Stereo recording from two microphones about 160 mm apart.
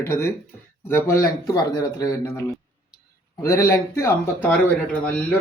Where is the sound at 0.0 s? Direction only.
15° left (ahead or behind).